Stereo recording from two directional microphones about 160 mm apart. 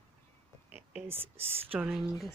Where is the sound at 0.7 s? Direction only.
5° right (ahead or behind).